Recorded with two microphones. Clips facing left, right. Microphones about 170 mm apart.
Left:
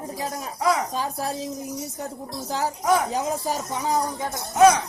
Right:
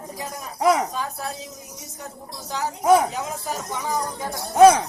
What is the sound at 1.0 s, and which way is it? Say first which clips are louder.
Speech: left 3 dB; 35° left (ahead or behind).